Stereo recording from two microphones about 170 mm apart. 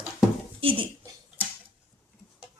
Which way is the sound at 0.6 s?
30° right (ahead or behind).